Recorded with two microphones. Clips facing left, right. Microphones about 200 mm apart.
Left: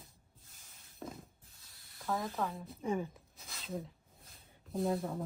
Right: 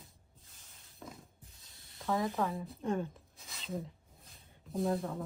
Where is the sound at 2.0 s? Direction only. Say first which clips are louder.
Right 4 dB; centre (ahead or behind).